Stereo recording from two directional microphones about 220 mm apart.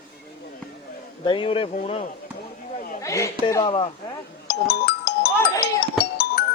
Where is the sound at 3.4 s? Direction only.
20° left (ahead or behind).